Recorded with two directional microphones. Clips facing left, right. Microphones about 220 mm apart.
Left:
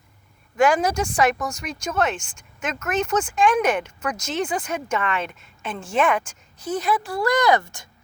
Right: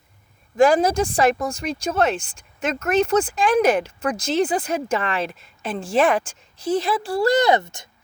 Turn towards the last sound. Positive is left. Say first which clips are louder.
# right 1 dB
turn(degrees=-20)  # may be behind; listen again after turning